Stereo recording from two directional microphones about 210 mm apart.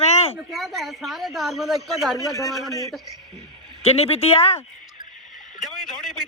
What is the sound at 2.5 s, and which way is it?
Speech, centre (ahead or behind).